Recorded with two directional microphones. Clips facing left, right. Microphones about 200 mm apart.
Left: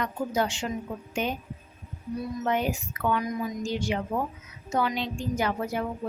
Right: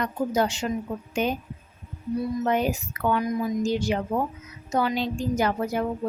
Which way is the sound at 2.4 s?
40° right (ahead or behind).